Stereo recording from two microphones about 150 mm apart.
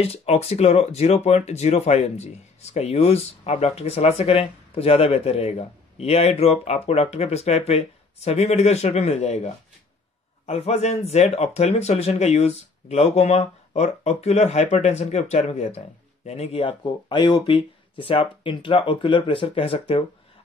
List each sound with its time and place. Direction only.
0.0 s speech: 45° left (ahead or behind)